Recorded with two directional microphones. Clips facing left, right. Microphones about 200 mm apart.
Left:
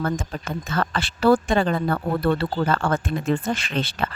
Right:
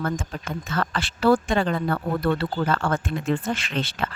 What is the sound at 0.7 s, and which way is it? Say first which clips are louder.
Speech: left 2 dB; 30° left (ahead or behind).